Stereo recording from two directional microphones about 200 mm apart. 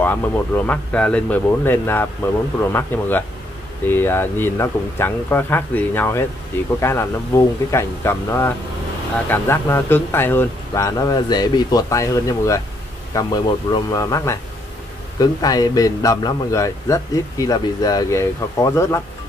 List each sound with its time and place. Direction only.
0.0 s a man's voice: 10° left (ahead or behind)